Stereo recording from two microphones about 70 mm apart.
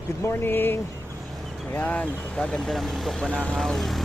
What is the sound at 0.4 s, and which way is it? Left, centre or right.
Speech, left.